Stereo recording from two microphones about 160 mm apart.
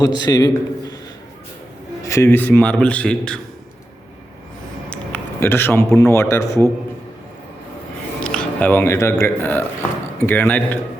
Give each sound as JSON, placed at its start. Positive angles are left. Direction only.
{"t": 0.0, "sound": "a man's voice", "side_deg": 25}
{"t": 2.0, "sound": "a man's voice", "side_deg": 15}
{"t": 4.9, "sound": "speech", "side_deg": 15}
{"t": 8.2, "sound": "a man's voice", "side_deg": 5}